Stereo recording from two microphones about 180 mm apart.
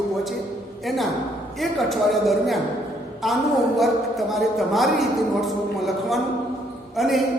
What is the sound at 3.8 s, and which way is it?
Speech, centre (ahead or behind).